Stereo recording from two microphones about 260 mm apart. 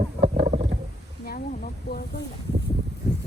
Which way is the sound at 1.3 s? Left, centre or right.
Left.